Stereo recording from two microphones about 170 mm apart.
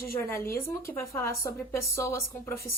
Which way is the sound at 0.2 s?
15° left (ahead or behind).